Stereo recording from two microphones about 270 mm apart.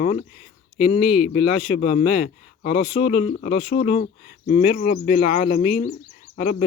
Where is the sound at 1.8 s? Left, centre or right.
Left.